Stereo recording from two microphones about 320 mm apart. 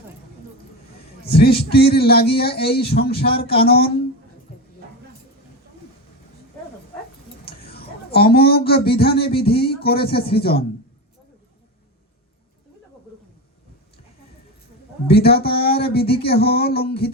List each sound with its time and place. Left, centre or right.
1.3 s a man's voice: left
7.4 s speech: left
15.0 s a man's voice: left